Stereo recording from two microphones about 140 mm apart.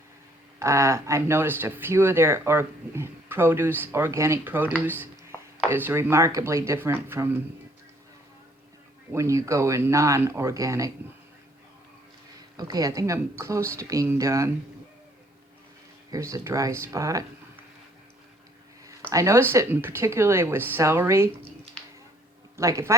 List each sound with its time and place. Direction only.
0.6 s speech: 20° right (ahead or behind)
9.1 s speech: 20° right (ahead or behind)
12.5 s speech: 25° right (ahead or behind)
16.1 s speech: 20° right (ahead or behind)
19.1 s speech: 20° right (ahead or behind)
22.5 s speech: 20° right (ahead or behind)